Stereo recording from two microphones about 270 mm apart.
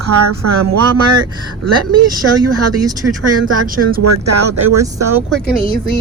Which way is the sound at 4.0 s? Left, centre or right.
Right.